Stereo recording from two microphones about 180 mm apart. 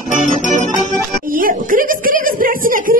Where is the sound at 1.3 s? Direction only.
50° right (ahead or behind).